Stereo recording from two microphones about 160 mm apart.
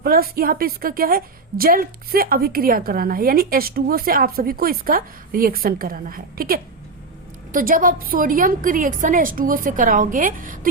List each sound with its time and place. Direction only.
0.0 s a woman's voice: 70° right (ahead or behind)